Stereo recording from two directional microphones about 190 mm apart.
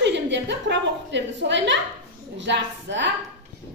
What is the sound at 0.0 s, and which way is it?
A woman's voice, 70° right (ahead or behind).